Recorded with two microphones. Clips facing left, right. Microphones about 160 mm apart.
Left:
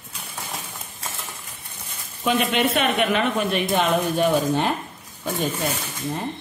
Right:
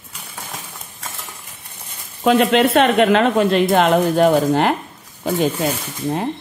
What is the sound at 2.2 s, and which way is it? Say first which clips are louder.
Speech: right 7 dB; 90° right.